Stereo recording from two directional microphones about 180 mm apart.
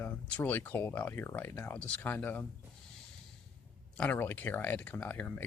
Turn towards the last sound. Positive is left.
turn(degrees=10)  # may be behind; listen again after turning